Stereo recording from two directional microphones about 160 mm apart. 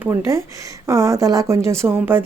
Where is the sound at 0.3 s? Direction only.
20° right (ahead or behind).